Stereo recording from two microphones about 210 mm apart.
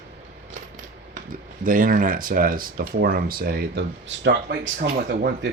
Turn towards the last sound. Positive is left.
turn(degrees=-50)  # may be behind; listen again after turning